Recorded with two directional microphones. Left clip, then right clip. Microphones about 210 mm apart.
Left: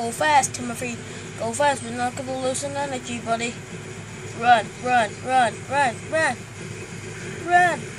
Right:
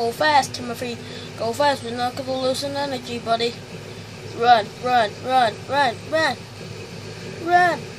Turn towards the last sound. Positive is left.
turn(degrees=-5)  # may be behind; listen again after turning